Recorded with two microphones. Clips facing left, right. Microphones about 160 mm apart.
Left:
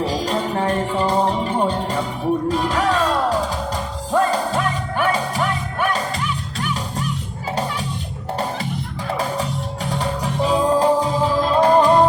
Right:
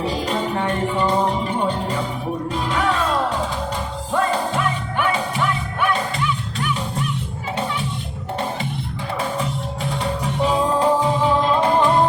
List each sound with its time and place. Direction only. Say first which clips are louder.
0.0 s music: left 1 dB; 35° left (ahead or behind)
4.2 s music: left 1 dB; 35° left (ahead or behind)
10.0 s music: even; 35° left (ahead or behind)